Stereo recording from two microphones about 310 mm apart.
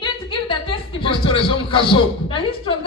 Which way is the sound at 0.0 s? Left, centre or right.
Centre.